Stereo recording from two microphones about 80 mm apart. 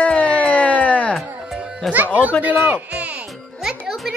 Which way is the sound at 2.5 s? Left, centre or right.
Right.